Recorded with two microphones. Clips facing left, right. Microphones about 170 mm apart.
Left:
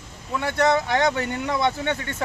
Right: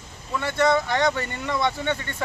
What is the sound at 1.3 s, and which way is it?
Speech, 15° left (ahead or behind).